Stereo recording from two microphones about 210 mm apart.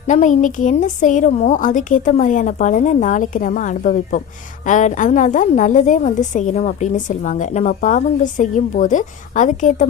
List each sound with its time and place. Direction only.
0.1 s a woman's voice: 35° left (ahead or behind)